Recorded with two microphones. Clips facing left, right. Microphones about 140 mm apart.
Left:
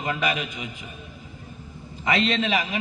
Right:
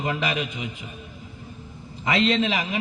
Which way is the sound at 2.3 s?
30° right (ahead or behind).